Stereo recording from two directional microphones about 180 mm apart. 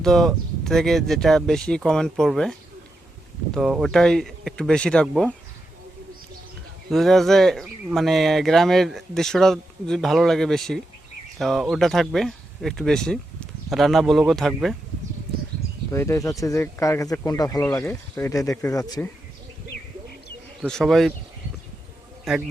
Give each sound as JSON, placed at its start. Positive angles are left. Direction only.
{"t": 0.0, "sound": "speech", "side_deg": 0}
{"t": 6.9, "sound": "speech", "side_deg": 0}
{"t": 15.9, "sound": "speech", "side_deg": 15}
{"t": 20.6, "sound": "speech", "side_deg": 0}
{"t": 22.2, "sound": "a man's voice", "side_deg": -5}